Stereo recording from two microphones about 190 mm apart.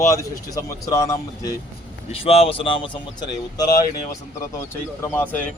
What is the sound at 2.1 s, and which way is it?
Speech, 30° left (ahead or behind).